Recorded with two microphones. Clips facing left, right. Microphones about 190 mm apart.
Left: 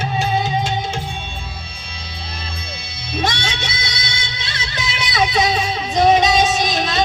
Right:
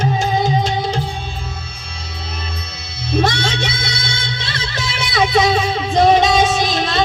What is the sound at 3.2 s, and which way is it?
Music, 55° right (ahead or behind).